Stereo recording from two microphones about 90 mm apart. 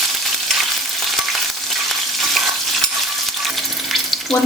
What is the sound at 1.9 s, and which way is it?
Stir, centre (ahead or behind).